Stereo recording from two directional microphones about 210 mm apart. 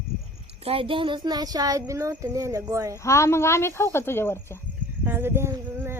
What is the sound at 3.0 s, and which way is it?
Speech, 15° left (ahead or behind).